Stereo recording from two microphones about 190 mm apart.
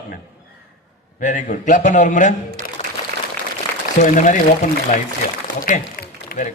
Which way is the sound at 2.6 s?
40° right (ahead or behind).